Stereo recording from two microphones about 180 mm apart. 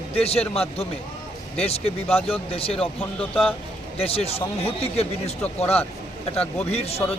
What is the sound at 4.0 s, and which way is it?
Speech, 35° left (ahead or behind).